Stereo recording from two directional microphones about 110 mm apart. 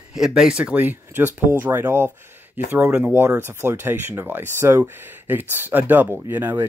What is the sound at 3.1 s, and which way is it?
Speech, 20° right (ahead or behind).